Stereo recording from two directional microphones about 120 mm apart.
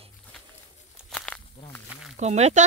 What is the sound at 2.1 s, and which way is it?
Speech, 70° right (ahead or behind).